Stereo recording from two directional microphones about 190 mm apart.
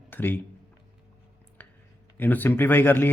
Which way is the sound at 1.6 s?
10° left (ahead or behind).